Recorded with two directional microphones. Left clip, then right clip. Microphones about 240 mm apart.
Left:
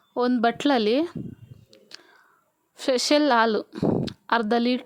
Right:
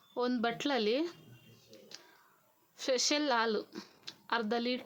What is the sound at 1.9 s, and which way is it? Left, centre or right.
Whispering, left.